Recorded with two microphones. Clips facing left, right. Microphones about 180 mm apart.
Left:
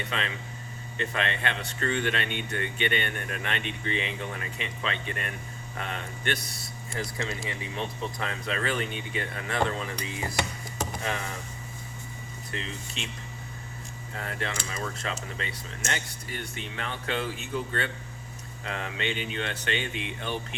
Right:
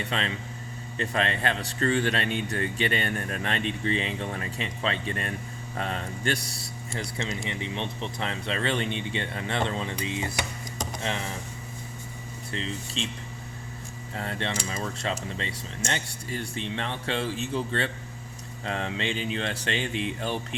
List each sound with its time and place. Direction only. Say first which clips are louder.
0.0 s a man's voice: right 3 dB; 35° right (ahead or behind)
8.2 s speech: right 3 dB; 30° right (ahead or behind)
12.5 s a man's voice: right 4 dB; 30° right (ahead or behind)
14.1 s a man's voice: right 3 dB; 30° right (ahead or behind)